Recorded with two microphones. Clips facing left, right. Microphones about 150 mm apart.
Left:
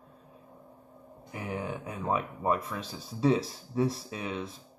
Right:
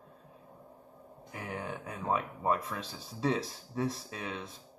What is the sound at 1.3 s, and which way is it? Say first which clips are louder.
Speech: left 4 dB; 10° left (ahead or behind).